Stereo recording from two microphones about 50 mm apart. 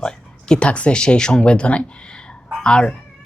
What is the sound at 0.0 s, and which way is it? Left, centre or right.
A woman's voice, centre.